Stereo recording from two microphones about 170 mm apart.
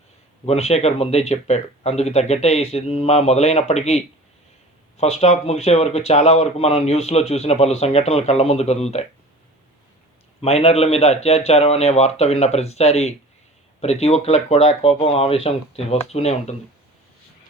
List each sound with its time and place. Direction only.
0.4 s speech: 40° left (ahead or behind)
10.4 s speech: 35° left (ahead or behind)